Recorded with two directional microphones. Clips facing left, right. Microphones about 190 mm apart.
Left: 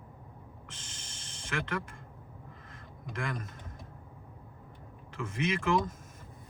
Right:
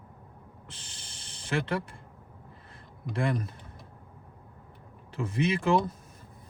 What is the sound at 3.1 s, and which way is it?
Speech, 35° right (ahead or behind).